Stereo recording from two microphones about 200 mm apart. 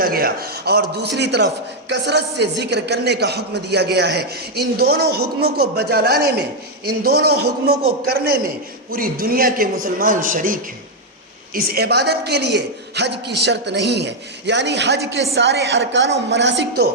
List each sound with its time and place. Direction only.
0.0 s a man's voice: 50° right (ahead or behind)